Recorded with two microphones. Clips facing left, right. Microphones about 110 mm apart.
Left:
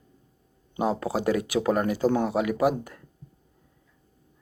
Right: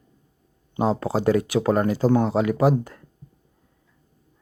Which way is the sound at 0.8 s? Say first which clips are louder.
Right 3 dB; 30° right (ahead or behind).